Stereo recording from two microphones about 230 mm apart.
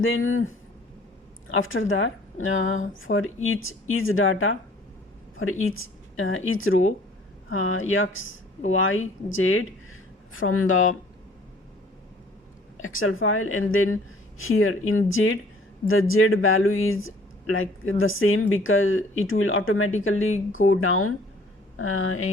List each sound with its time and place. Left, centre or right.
0.0 s speech: left
5.7 s speech: left
12.7 s speech: left